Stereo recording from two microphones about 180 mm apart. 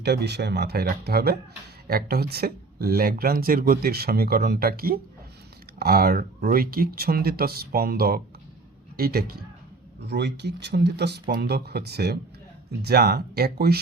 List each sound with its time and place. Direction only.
0.0 s speech: 65° right (ahead or behind)
10.0 s speech: 70° right (ahead or behind)